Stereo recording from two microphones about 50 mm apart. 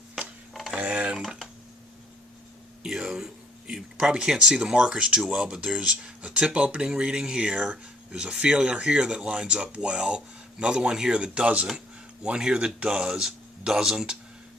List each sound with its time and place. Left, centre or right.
0.7 s cutlery: right
2.8 s a sound: centre
3.9 s speech: centre